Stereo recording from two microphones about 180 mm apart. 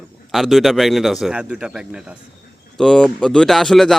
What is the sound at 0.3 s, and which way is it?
A man's voice, centre (ahead or behind).